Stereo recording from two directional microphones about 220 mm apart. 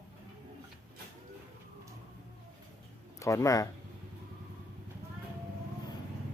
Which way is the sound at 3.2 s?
15° left (ahead or behind).